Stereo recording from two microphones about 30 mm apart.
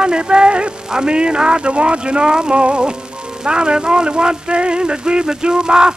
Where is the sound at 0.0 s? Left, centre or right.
Right.